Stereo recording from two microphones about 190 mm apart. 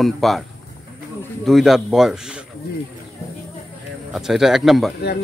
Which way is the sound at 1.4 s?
Centre (ahead or behind).